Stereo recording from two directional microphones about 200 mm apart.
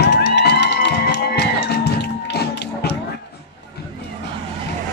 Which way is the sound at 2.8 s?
55° left (ahead or behind).